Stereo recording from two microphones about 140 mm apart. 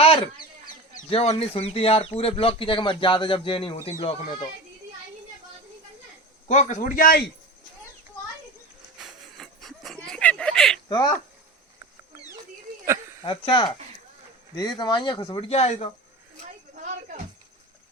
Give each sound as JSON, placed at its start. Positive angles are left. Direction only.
{"t": 1.1, "sound": "speech", "side_deg": 45}
{"t": 6.5, "sound": "a man's voice", "side_deg": 60}
{"t": 9.0, "sound": "a sound", "side_deg": 0}
{"t": 10.8, "sound": "speech", "side_deg": 30}
{"t": 13.2, "sound": "speech", "side_deg": 35}